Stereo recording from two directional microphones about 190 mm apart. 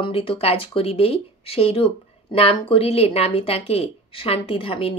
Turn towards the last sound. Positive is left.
turn(degrees=30)  # may be behind; listen again after turning